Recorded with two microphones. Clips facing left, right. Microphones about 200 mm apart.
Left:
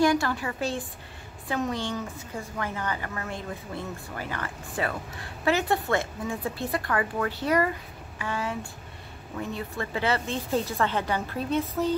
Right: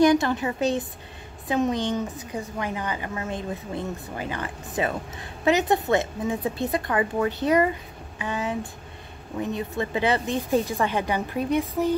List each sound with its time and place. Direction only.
0.0 s a woman's voice: 20° right (ahead or behind)